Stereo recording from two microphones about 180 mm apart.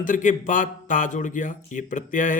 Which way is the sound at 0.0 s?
45° left (ahead or behind).